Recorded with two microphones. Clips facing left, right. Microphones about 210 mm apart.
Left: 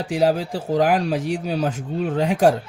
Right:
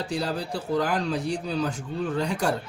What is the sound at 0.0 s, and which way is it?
Speech, 90° left.